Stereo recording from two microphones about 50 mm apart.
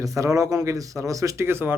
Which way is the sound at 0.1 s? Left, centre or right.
Right.